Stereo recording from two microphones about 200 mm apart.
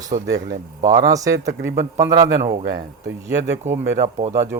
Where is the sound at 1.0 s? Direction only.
15° right (ahead or behind).